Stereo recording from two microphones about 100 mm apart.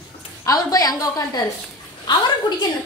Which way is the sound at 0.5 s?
35° left (ahead or behind).